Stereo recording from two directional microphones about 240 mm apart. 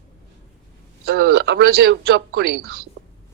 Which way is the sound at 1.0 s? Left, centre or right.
Right.